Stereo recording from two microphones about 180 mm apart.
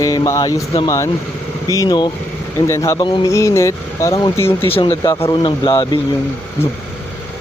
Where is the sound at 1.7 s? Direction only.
20° left (ahead or behind).